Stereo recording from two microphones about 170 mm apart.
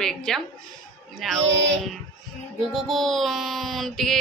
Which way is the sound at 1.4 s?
90° right.